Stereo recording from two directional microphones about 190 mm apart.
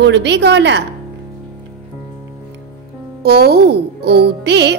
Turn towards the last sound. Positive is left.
turn(degrees=-65)  # may be behind; listen again after turning